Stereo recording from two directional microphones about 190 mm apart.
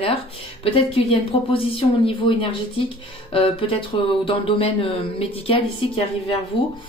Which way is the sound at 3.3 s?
30° left (ahead or behind).